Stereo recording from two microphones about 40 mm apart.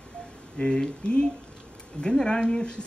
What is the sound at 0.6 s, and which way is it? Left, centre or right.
Speech, left.